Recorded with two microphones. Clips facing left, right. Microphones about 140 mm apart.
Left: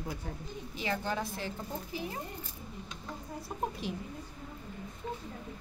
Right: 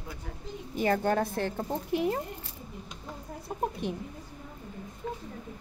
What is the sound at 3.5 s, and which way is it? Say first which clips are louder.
Speech: right 4 dB; 60° right (ahead or behind).